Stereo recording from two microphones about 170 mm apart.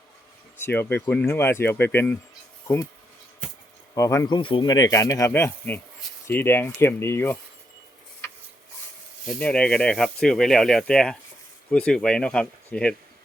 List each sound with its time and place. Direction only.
0.6 s speech: 10° left (ahead or behind)
3.9 s speech: 15° left (ahead or behind)
4.4 s speech: 30° left (ahead or behind); by 7.3 s 15° left (ahead or behind)
9.2 s speech: 5° left (ahead or behind)